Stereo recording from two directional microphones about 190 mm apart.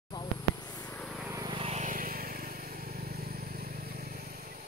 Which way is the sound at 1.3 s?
20° right (ahead or behind).